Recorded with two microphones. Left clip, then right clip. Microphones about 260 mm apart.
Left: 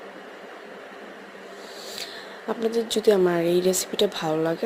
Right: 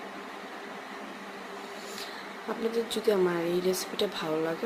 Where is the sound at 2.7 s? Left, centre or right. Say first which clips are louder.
Left 7 dB; left.